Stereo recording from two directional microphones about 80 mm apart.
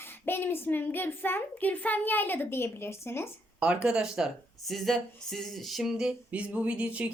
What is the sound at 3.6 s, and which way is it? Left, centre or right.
Speech, centre.